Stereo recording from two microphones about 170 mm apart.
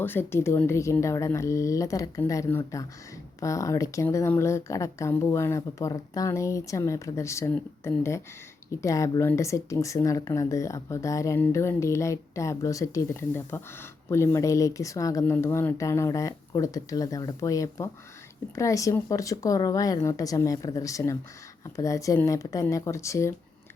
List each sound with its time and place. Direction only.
0.0 s speech: 10° left (ahead or behind)